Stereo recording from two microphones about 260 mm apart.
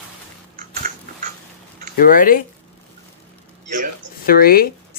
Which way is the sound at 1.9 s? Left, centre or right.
Left.